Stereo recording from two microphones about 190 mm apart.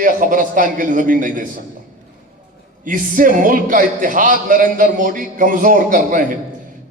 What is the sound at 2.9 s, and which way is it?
A man's voice, 45° right (ahead or behind).